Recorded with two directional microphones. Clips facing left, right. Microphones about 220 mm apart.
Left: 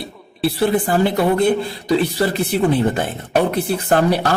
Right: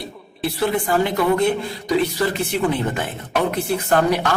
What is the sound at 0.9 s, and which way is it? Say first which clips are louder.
A woman's voice: left 2 dB; 35° left (ahead or behind).